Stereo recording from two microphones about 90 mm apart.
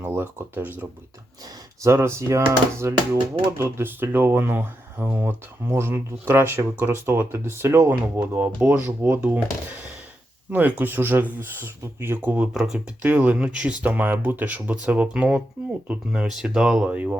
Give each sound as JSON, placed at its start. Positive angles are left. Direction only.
{"t": 0.0, "sound": "speech", "side_deg": -25}
{"t": 12.5, "sound": "speech", "side_deg": -5}
{"t": 13.0, "sound": "speech", "side_deg": -20}